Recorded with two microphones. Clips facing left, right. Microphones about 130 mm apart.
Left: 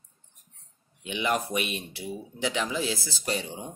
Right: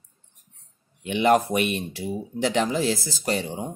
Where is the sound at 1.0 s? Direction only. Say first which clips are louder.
Right 9 dB; 50° right (ahead or behind).